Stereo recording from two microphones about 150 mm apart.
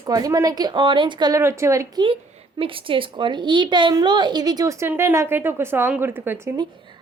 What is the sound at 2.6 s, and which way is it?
A woman's voice, 35° right (ahead or behind).